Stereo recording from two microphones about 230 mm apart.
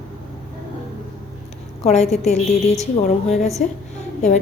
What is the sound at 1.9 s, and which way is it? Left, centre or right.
A woman's voice, left.